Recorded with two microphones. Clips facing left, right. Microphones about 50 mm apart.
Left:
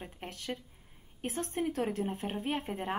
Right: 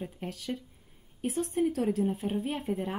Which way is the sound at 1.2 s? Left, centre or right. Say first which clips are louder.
Right 5 dB; left.